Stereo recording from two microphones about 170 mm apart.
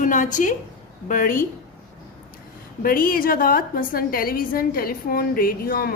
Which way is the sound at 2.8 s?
55° left (ahead or behind).